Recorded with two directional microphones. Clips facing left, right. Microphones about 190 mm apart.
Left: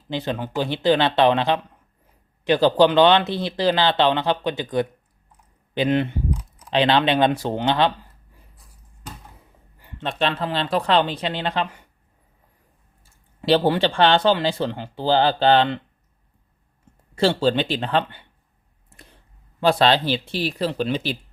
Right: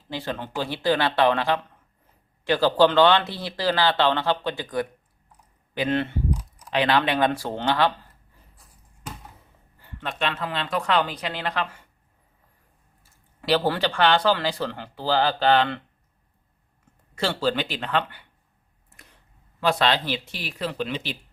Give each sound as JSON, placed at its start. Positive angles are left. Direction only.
{"t": 0.1, "sound": "speech", "side_deg": 20}
{"t": 6.6, "sound": "speech", "side_deg": 25}
{"t": 9.7, "sound": "a sound", "side_deg": 15}
{"t": 10.0, "sound": "speech", "side_deg": 30}
{"t": 13.0, "sound": "speech", "side_deg": 25}
{"t": 17.2, "sound": "speech", "side_deg": 30}
{"t": 18.9, "sound": "a sound", "side_deg": 30}
{"t": 19.5, "sound": "speech", "side_deg": 30}